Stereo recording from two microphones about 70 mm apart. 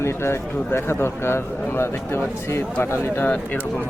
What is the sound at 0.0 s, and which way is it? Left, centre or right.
Speech, left.